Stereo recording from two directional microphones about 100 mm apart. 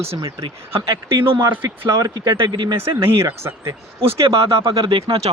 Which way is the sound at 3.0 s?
30° right (ahead or behind).